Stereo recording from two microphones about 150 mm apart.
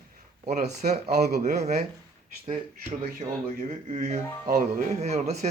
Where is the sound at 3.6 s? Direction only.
55° right (ahead or behind).